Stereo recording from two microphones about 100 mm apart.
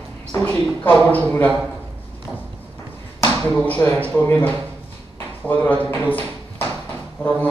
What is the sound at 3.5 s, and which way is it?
Speech, 20° left (ahead or behind).